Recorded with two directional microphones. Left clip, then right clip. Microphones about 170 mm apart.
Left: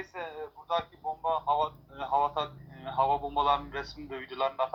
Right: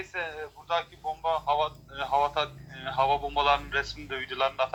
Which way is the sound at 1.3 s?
35° right (ahead or behind).